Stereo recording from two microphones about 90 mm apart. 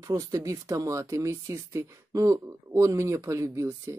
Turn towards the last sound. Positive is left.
turn(degrees=-35)  # may be behind; listen again after turning